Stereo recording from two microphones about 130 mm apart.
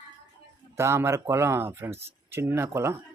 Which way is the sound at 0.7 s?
20° right (ahead or behind).